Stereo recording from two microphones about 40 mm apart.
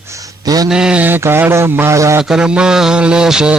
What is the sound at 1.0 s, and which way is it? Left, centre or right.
Speech, right.